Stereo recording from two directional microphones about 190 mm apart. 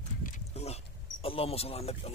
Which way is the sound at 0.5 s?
35° left (ahead or behind).